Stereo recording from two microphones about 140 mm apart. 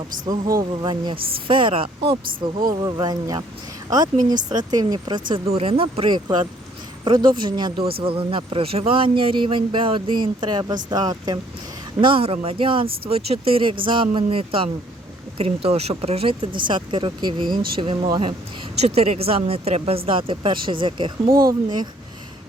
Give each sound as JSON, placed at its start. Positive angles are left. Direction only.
{"t": 0.8, "sound": "speech", "side_deg": -35}
{"t": 5.5, "sound": "speech", "side_deg": -45}
{"t": 11.9, "sound": "speech", "side_deg": -40}
{"t": 17.5, "sound": "speech", "side_deg": -90}
{"t": 17.7, "sound": "speech", "side_deg": -40}
{"t": 21.2, "sound": "speech", "side_deg": -90}